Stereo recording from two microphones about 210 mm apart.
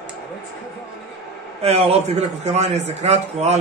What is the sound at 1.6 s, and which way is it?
A man's voice, 30° right (ahead or behind).